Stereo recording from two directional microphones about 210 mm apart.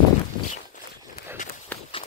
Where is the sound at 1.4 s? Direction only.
35° left (ahead or behind).